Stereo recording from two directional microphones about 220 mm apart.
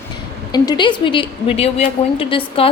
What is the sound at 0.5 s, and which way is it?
A woman's voice, 20° left (ahead or behind).